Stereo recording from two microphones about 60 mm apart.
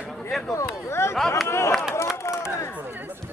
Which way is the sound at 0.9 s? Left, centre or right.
Left.